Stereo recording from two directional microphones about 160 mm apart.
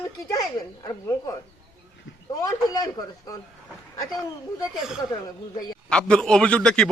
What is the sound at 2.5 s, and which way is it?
Speech, 20° left (ahead or behind).